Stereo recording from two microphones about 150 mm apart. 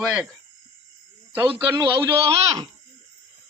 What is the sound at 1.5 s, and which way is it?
Speech, 30° right (ahead or behind).